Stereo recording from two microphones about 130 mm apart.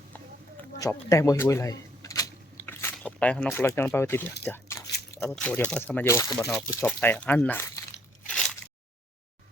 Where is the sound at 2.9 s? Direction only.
10° left (ahead or behind).